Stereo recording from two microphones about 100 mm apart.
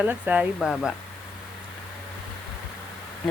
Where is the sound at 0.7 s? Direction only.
Centre (ahead or behind).